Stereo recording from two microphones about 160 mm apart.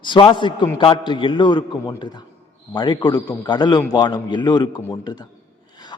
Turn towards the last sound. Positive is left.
turn(degrees=25)  # may be behind; listen again after turning